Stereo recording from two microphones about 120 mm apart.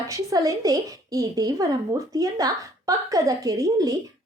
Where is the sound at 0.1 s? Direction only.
30° right (ahead or behind).